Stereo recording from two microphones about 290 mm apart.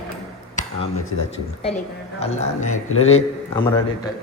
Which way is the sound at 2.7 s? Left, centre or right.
Left.